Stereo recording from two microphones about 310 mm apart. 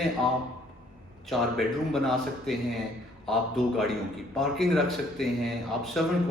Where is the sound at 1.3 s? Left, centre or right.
Centre.